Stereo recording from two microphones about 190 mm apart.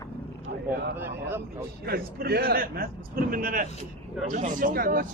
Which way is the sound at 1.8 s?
55° right (ahead or behind).